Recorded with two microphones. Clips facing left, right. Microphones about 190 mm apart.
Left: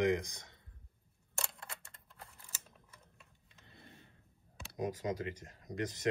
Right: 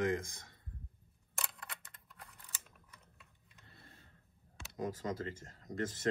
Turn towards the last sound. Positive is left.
turn(degrees=15)  # may be behind; listen again after turning